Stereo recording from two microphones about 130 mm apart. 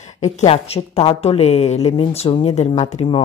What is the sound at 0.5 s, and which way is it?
A woman's voice, 50° left (ahead or behind).